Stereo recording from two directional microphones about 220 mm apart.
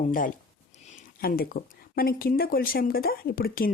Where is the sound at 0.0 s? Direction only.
40° left (ahead or behind).